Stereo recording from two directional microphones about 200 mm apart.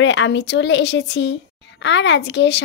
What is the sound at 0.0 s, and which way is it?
Speech, 65° left (ahead or behind).